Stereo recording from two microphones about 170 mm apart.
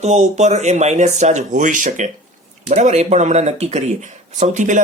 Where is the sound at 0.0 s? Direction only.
40° right (ahead or behind).